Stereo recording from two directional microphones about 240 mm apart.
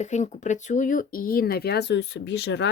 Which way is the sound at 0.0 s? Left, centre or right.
Left.